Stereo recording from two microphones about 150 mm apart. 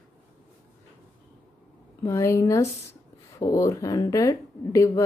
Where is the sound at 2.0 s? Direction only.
20° left (ahead or behind).